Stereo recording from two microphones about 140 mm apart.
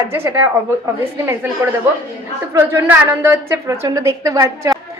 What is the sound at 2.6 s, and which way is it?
A woman's voice, 20° right (ahead or behind).